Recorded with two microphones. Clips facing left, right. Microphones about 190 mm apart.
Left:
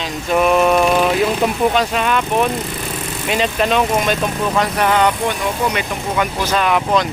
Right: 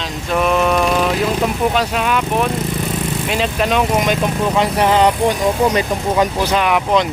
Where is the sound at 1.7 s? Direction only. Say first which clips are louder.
Even; 5° right (ahead or behind).